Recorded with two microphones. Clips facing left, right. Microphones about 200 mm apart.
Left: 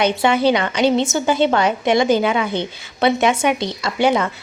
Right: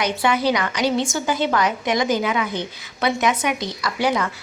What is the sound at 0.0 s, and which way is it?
A woman's voice, 25° left (ahead or behind).